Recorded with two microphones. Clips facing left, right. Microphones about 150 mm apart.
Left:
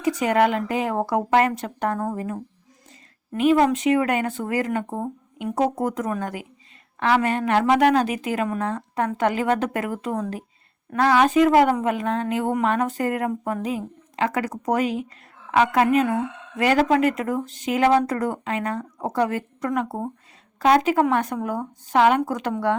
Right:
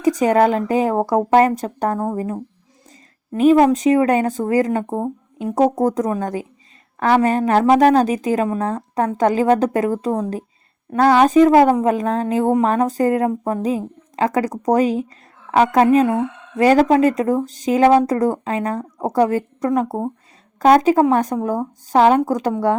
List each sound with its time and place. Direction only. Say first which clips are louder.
0.0 s a woman's voice: right 5 dB; 40° right (ahead or behind)